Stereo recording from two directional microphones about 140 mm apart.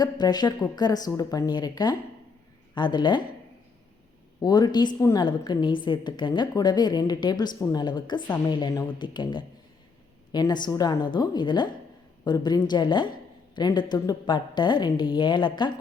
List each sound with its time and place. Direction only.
0.0 s a woman's voice: 30° left (ahead or behind)
4.4 s a woman's voice: 30° left (ahead or behind)